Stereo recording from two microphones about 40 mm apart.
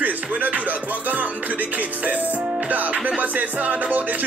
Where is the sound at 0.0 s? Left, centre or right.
Right.